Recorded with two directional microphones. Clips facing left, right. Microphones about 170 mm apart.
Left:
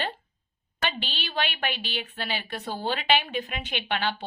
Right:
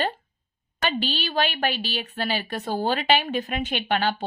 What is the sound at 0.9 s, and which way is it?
A woman's voice, 40° right (ahead or behind).